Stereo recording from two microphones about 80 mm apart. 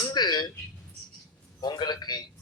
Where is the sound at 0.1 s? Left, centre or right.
Left.